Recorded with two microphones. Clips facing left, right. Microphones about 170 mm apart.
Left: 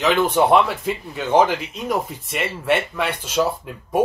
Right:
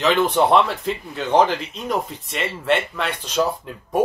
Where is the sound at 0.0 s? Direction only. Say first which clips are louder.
Even; 5° left (ahead or behind).